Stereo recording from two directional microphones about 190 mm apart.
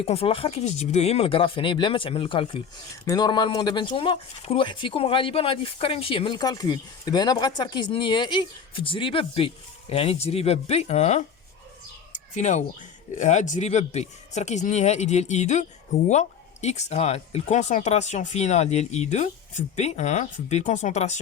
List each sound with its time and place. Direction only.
0.0 s speech: 30° left (ahead or behind)
12.1 s a sound: 40° left (ahead or behind)
13.1 s speech: 40° left (ahead or behind)